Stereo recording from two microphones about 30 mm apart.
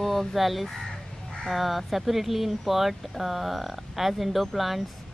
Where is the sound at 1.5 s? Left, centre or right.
Centre.